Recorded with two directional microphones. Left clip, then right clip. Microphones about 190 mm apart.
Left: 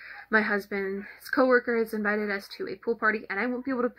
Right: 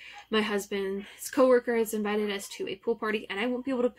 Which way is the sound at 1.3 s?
35° right (ahead or behind).